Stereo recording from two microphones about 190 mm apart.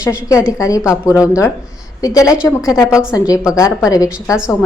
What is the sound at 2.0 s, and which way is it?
A woman's voice, 20° left (ahead or behind).